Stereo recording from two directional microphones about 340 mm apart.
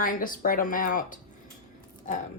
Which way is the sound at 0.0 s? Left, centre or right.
Left.